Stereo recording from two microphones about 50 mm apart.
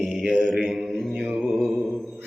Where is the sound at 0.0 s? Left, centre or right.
Centre.